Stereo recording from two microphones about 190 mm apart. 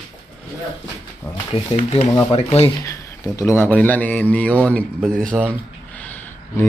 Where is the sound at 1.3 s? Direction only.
30° left (ahead or behind).